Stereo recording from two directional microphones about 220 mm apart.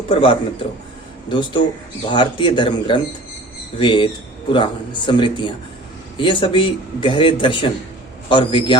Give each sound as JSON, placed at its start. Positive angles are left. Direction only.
{"t": 0.1, "sound": "a man's voice", "side_deg": 25}